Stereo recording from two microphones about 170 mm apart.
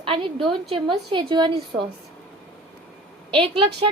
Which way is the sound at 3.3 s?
30° right (ahead or behind).